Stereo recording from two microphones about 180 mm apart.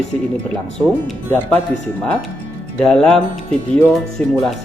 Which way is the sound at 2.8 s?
5° left (ahead or behind).